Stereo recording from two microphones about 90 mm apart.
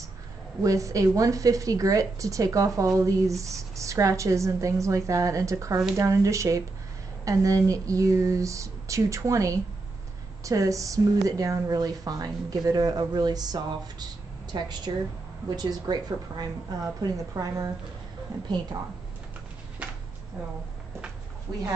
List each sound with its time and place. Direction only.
0.6 s a woman's voice: 35° right (ahead or behind)